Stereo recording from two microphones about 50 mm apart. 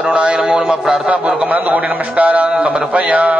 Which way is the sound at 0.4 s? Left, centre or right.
Centre.